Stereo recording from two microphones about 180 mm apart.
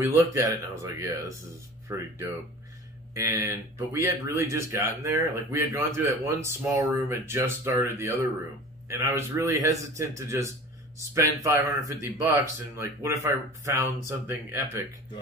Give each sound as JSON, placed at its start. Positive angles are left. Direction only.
{"t": 0.0, "sound": "speech", "side_deg": -15}